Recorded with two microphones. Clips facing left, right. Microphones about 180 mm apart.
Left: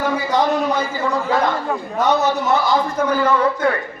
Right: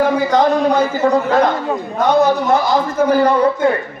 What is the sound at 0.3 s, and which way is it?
Speech, 50° right (ahead or behind).